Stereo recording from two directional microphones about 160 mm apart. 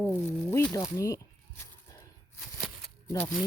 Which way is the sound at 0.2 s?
15° left (ahead or behind).